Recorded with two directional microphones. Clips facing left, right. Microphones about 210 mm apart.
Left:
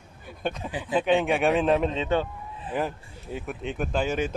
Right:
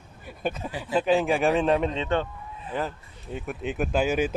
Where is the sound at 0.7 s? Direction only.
15° left (ahead or behind).